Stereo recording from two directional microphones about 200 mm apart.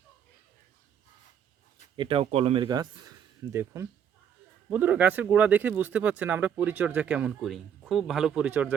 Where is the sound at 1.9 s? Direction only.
25° right (ahead or behind); by 8.7 s 5° right (ahead or behind).